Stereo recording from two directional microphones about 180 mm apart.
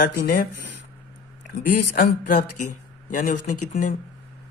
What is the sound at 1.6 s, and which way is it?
Speech, 55° left (ahead or behind).